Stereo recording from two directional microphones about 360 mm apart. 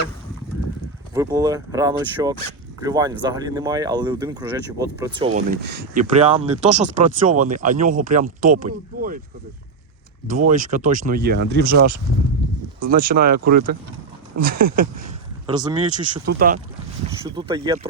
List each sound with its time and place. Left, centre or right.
1.1 s speech: centre
10.5 s speech: right
12.9 s speech: right
15.4 s speech: centre
16.2 s speech: right
17.1 s speech: centre